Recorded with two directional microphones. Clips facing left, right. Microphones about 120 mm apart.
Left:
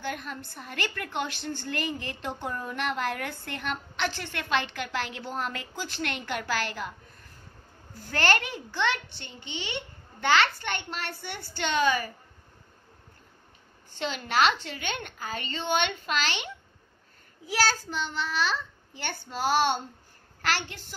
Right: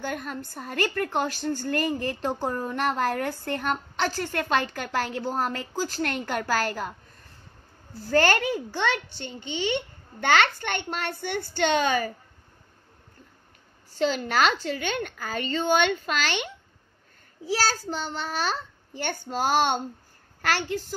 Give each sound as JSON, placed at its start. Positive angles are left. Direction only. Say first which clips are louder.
{"t": 0.0, "sound": "speech", "louder": "right 3 dB", "side_deg": -45}
{"t": 7.9, "sound": "a child's voice", "louder": "right 5 dB", "side_deg": -35}
{"t": 13.8, "sound": "speech", "louder": "right 7 dB", "side_deg": -40}
{"t": 17.5, "sound": "a child's voice", "louder": "right 1 dB", "side_deg": -35}